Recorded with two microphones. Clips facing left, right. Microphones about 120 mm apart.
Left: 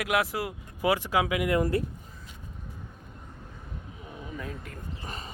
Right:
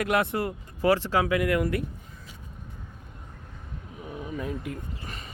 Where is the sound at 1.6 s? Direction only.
30° left (ahead or behind).